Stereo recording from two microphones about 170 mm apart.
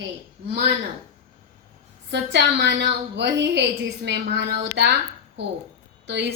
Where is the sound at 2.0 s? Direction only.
85° right.